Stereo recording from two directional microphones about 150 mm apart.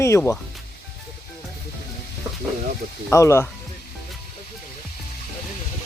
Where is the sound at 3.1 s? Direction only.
20° left (ahead or behind).